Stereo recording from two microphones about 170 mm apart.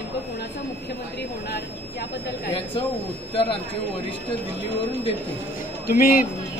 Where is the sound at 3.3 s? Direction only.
30° left (ahead or behind).